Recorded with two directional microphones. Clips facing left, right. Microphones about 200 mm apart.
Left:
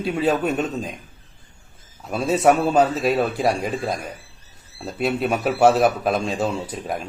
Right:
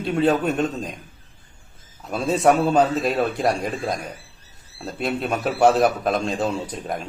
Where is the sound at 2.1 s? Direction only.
5° left (ahead or behind).